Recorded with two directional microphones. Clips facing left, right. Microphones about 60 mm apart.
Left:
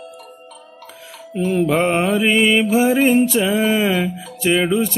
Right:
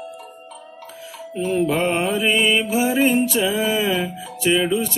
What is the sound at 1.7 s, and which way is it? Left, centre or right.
Mantra, left.